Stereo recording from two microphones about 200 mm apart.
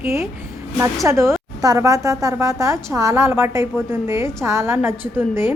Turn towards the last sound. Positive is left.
turn(degrees=-10)  # may be behind; listen again after turning